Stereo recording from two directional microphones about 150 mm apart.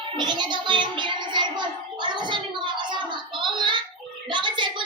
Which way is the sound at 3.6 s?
30° right (ahead or behind).